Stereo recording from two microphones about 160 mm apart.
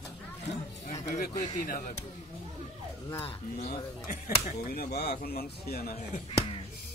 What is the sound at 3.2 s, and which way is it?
Speech, 40° left (ahead or behind).